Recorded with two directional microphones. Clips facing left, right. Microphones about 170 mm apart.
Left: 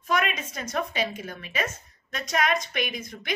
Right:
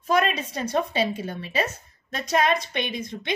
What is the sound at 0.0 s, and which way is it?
A woman's voice, 35° right (ahead or behind).